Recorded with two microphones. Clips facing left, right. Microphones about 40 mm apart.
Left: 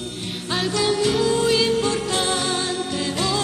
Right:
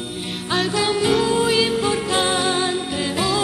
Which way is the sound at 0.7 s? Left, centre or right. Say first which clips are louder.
Right 1 dB; centre.